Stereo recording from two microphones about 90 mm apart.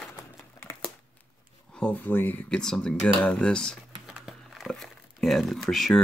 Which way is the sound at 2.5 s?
5° left (ahead or behind).